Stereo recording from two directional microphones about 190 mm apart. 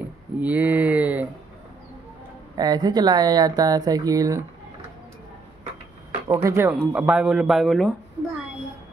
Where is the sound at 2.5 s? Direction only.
20° right (ahead or behind).